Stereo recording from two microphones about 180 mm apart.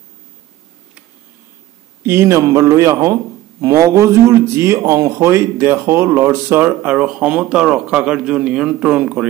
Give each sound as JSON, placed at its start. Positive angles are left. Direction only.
{"t": 2.0, "sound": "a man's voice", "side_deg": -15}